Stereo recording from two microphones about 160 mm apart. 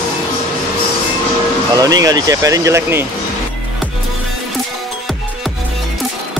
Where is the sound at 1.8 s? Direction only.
25° right (ahead or behind).